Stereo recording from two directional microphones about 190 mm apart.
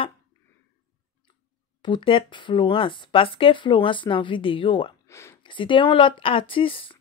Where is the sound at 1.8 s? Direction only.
25° left (ahead or behind).